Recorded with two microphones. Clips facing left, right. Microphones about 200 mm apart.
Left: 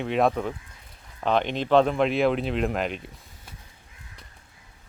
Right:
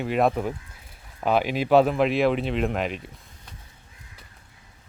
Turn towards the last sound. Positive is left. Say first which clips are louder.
# right 1 dB
turn(degrees=0)  # may be behind; listen again after turning